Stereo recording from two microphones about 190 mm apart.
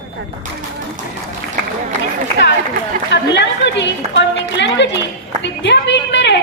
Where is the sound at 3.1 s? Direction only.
65° left (ahead or behind).